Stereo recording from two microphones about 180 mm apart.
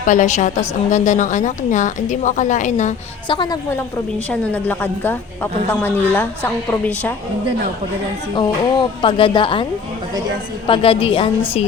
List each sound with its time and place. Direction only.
0.0 s a woman's voice: 45° left (ahead or behind)
3.2 s speech: 25° left (ahead or behind)
4.3 s a woman's voice: 10° left (ahead or behind)
8.4 s speech: 25° left (ahead or behind)
10.7 s a woman's voice: 30° left (ahead or behind)